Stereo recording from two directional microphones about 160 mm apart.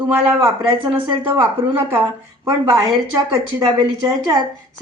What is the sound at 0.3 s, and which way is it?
Speech, 30° right (ahead or behind).